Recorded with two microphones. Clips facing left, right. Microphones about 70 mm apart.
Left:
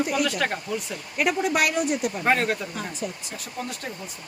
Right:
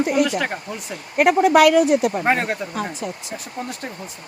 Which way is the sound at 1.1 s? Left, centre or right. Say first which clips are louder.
Right 8 dB; right.